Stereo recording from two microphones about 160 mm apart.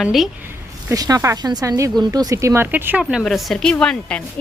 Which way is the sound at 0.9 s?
20° right (ahead or behind).